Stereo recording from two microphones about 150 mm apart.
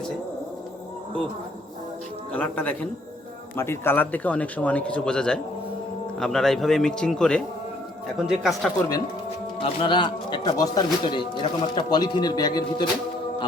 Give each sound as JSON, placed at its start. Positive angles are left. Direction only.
{"t": 2.3, "sound": "a man's voice", "side_deg": 10}
{"t": 9.6, "sound": "speech", "side_deg": 35}